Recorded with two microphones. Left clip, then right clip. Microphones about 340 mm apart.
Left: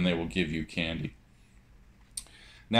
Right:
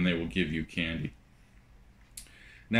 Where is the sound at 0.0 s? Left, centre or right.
Centre.